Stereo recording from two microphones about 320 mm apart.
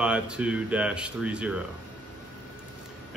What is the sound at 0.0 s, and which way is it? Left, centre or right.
A man's voice, centre.